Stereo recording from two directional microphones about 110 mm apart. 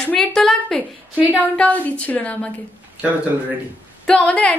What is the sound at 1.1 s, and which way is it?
Speech, 15° right (ahead or behind).